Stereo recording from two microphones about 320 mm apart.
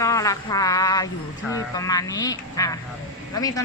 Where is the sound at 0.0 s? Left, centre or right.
Centre.